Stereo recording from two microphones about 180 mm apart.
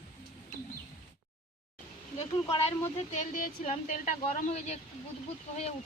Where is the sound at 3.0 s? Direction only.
40° left (ahead or behind).